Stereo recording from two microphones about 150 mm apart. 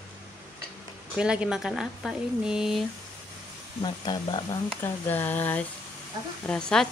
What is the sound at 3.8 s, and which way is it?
Speech, 30° left (ahead or behind).